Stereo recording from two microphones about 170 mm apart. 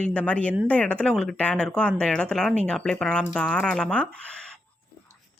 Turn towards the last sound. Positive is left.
turn(degrees=5)  # may be behind; listen again after turning